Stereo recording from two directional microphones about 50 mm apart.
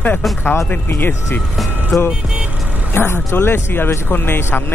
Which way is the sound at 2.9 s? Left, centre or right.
Left.